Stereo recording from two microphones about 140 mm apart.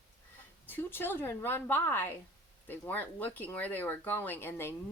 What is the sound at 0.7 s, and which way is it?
Speech, 15° left (ahead or behind).